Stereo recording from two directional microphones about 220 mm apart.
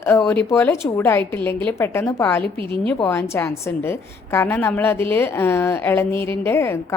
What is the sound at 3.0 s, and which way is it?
A woman's voice, 10° left (ahead or behind).